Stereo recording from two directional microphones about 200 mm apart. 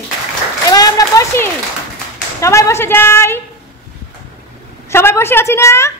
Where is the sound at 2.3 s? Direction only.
15° left (ahead or behind).